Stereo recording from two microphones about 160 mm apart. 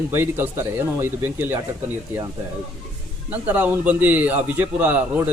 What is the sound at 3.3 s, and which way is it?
Speech, 10° right (ahead or behind).